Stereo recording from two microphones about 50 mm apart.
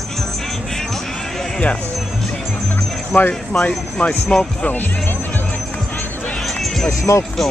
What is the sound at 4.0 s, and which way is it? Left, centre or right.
Speech, centre.